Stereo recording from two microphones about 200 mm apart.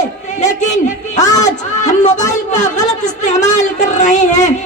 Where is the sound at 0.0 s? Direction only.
35° left (ahead or behind).